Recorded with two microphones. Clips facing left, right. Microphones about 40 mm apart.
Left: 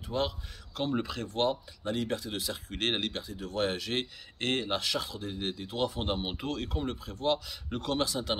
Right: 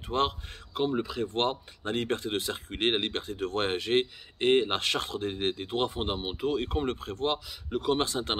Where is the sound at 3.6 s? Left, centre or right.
Right.